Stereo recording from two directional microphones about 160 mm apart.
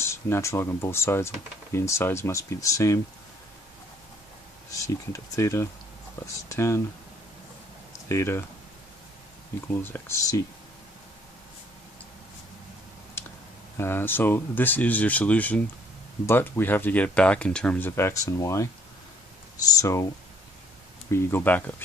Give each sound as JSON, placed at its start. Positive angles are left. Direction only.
{"t": 0.0, "sound": "speech", "side_deg": 15}
{"t": 4.6, "sound": "speech", "side_deg": 20}
{"t": 7.9, "sound": "speech", "side_deg": 15}
{"t": 9.7, "sound": "speech", "side_deg": 10}
{"t": 13.7, "sound": "speech", "side_deg": 15}
{"t": 21.1, "sound": "speech", "side_deg": 15}